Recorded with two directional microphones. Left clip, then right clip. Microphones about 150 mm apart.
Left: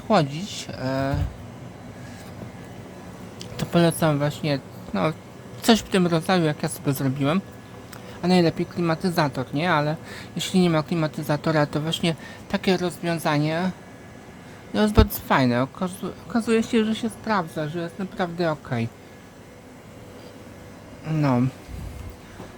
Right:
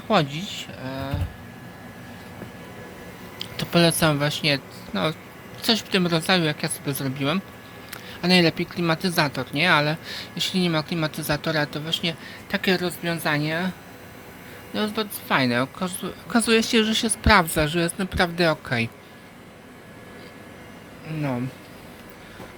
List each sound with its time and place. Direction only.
0.1 s speech: 5° left (ahead or behind)
0.7 s speech: 45° left (ahead or behind)
3.6 s a sound: 5° left (ahead or behind)
4.0 s speech: 5° left (ahead or behind)
6.8 s a woman's voice: 25° left (ahead or behind)
7.2 s speech: 15° left (ahead or behind)
10.2 s a woman's voice: 20° left (ahead or behind)
12.5 s speech: 15° left (ahead or behind)
15.3 s a woman's voice: 15° left (ahead or behind); by 17.4 s 5° right (ahead or behind)
17.5 s a woman's voice: 20° right (ahead or behind)
18.2 s a woman's voice: centre (ahead or behind)
21.1 s speech: 35° left (ahead or behind)